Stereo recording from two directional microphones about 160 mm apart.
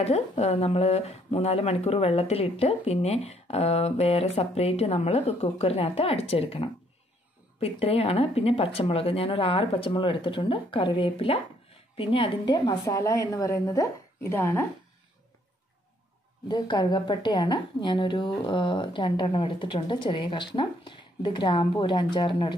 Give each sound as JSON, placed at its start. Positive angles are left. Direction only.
{"t": 0.0, "sound": "a woman's voice", "side_deg": 40}
{"t": 16.4, "sound": "a woman's voice", "side_deg": 30}